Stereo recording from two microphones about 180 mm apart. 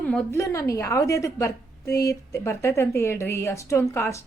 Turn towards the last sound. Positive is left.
turn(degrees=15)  # may be behind; listen again after turning